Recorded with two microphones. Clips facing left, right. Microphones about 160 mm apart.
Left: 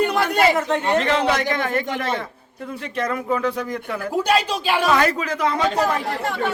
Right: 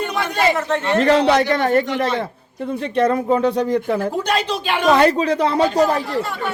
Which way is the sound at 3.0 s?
30° right (ahead or behind).